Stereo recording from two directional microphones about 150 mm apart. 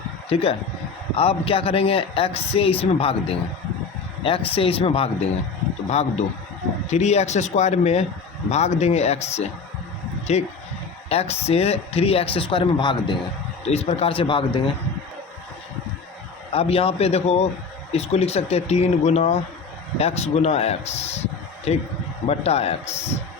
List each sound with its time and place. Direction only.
0.3 s a man's voice: 40° left (ahead or behind)
13.7 s a man's voice: 45° left (ahead or behind)
16.5 s a man's voice: 40° left (ahead or behind)